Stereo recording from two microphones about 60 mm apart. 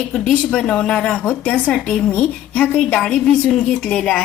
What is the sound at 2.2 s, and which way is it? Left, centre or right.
Speech, left.